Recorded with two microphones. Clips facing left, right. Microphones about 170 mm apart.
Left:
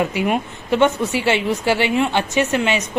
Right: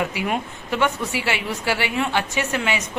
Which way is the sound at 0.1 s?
25° left (ahead or behind).